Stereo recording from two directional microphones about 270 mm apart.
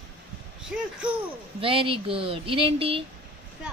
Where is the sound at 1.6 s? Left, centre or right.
Centre.